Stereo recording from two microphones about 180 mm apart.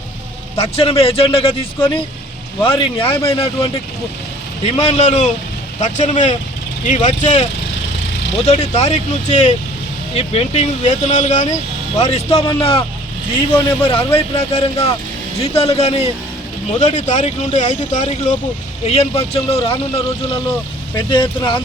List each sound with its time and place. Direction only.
0.5 s speech: 35° left (ahead or behind)
8.4 s speech: 40° left (ahead or behind)